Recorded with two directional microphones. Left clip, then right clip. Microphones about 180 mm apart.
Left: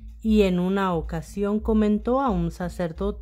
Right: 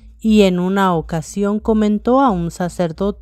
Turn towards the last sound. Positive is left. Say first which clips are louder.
# right 8 dB
turn(degrees=-35)  # may be behind; listen again after turning